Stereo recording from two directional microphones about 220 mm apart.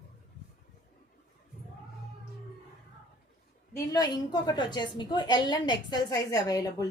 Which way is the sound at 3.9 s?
20° left (ahead or behind).